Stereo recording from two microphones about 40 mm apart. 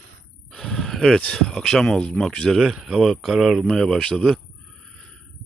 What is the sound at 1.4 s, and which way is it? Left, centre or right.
Speech, centre.